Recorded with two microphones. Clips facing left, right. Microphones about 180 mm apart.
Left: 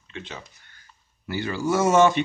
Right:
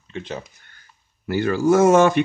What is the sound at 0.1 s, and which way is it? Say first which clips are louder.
Speech: right 7 dB; 40° right (ahead or behind).